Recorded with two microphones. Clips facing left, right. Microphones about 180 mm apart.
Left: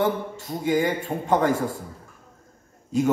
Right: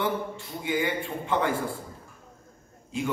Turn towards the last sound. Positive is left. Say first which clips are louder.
# left 8 dB
turn(degrees=40)  # may be behind; listen again after turning